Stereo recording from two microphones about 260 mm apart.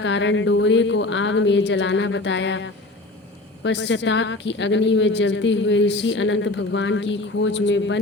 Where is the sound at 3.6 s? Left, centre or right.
Left.